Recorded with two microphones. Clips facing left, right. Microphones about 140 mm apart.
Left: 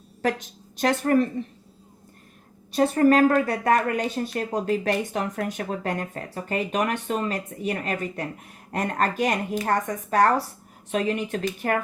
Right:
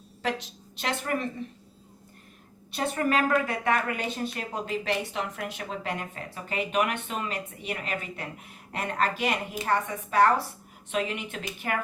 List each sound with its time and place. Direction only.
0.2 s speech: 45° left (ahead or behind)
2.7 s a woman's voice: 35° left (ahead or behind)